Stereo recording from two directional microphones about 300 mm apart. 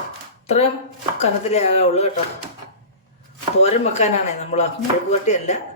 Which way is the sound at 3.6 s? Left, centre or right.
Left.